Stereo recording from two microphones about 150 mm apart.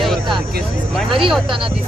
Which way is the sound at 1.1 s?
35° right (ahead or behind).